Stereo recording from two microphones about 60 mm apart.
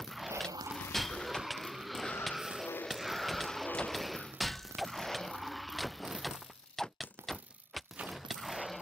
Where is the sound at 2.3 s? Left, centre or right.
Centre.